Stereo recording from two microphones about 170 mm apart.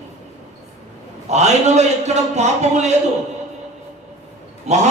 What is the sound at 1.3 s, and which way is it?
A man's voice, 40° right (ahead or behind).